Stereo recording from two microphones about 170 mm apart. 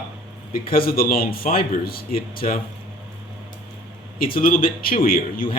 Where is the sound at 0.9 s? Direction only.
60° left (ahead or behind).